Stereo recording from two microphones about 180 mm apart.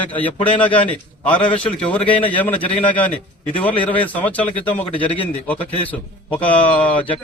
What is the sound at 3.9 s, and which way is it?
A man's voice, 10° left (ahead or behind).